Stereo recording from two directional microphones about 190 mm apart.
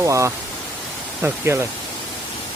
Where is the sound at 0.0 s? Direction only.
15° right (ahead or behind).